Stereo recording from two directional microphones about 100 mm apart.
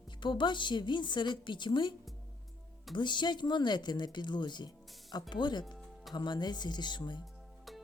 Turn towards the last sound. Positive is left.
turn(degrees=0)  # may be behind; listen again after turning